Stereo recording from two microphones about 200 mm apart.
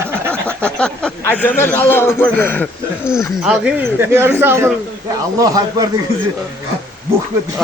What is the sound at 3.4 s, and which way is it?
Speech, 5° right (ahead or behind).